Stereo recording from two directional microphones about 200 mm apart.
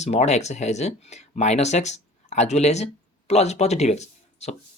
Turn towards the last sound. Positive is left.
turn(degrees=35)  # may be behind; listen again after turning